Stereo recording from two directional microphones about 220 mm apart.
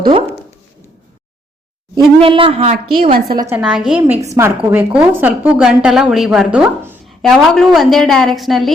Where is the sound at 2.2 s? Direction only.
25° right (ahead or behind).